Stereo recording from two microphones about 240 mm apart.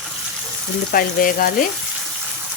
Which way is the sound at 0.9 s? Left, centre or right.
Left.